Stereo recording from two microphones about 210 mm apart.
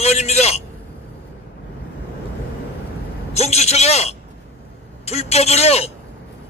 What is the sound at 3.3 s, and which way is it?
A man's voice, 30° left (ahead or behind).